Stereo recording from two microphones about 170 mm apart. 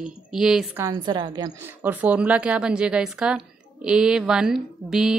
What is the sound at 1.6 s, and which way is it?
A woman's voice, 10° right (ahead or behind).